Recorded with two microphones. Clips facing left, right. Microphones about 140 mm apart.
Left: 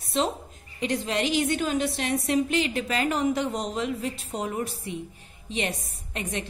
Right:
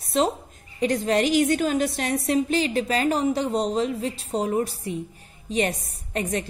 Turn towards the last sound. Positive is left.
turn(degrees=-40)  # may be behind; listen again after turning